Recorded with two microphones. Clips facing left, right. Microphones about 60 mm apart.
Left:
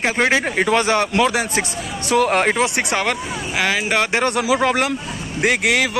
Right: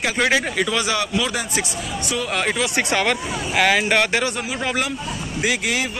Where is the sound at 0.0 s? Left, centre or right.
Left.